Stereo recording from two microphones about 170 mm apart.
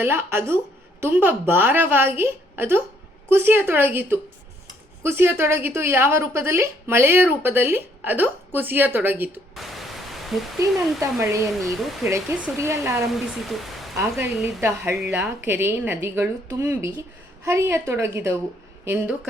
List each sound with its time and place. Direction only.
0.0 s a woman's voice: 15° right (ahead or behind)
9.6 s pink noise: centre (ahead or behind)
10.6 s a woman's voice: 15° right (ahead or behind)
13.4 s speech: centre (ahead or behind)
13.9 s a woman's voice: 15° right (ahead or behind)